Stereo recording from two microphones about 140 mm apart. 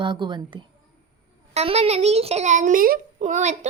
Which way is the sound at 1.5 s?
45° right (ahead or behind).